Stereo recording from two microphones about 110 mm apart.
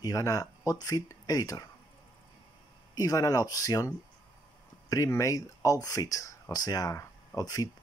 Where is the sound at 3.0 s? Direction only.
35° left (ahead or behind).